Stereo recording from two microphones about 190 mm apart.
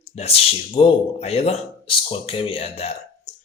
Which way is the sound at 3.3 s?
40° left (ahead or behind).